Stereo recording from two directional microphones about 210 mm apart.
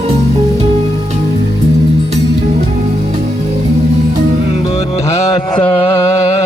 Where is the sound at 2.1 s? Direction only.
30° right (ahead or behind).